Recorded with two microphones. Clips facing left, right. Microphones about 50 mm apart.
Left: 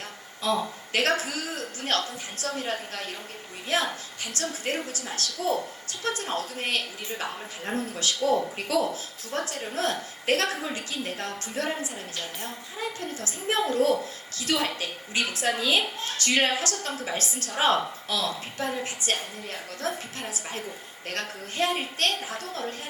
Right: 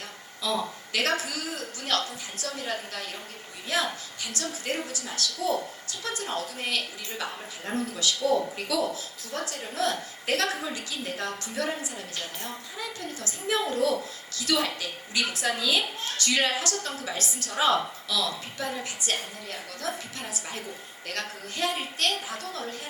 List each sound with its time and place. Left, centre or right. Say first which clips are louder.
0.4 s a woman's voice: left 2 dB; left